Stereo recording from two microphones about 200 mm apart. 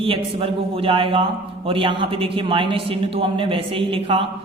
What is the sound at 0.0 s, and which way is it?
A man's voice, 25° right (ahead or behind).